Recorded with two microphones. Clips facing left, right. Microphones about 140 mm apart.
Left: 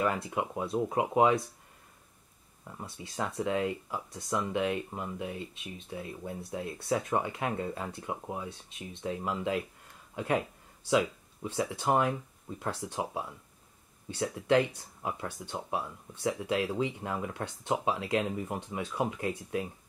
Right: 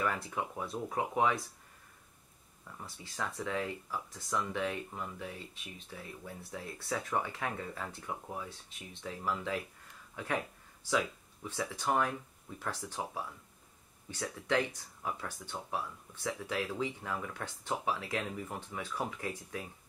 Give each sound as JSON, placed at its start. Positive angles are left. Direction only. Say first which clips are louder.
{"t": 0.0, "sound": "speech", "louder": "left 5 dB", "side_deg": 20}
{"t": 2.6, "sound": "speech", "louder": "left 5 dB", "side_deg": 20}